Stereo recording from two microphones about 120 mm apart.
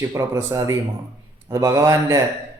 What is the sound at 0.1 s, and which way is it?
Speech, 30° right (ahead or behind).